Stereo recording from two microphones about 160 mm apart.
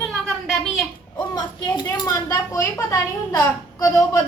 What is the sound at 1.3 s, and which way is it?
Speech, 20° left (ahead or behind).